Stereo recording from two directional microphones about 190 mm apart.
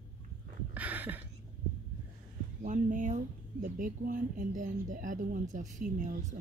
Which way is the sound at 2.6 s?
40° right (ahead or behind).